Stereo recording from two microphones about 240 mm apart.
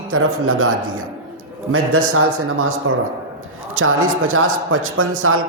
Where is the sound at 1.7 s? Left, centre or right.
Right.